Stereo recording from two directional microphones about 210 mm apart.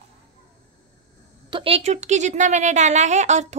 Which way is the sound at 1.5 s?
25° right (ahead or behind).